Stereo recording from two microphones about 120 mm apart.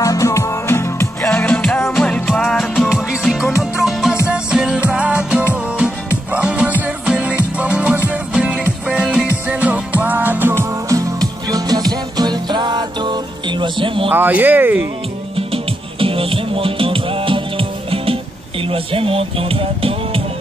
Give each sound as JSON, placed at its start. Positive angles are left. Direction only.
{"t": 0.0, "sound": "music", "side_deg": 25}
{"t": 14.1, "sound": "speech", "side_deg": -15}
{"t": 15.3, "sound": "music", "side_deg": -50}
{"t": 18.7, "sound": "speech", "side_deg": -50}